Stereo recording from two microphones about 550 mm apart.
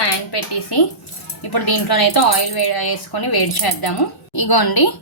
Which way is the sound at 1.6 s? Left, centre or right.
Left.